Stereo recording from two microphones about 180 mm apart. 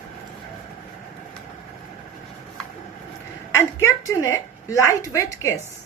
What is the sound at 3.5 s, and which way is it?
A woman's voice, 15° left (ahead or behind).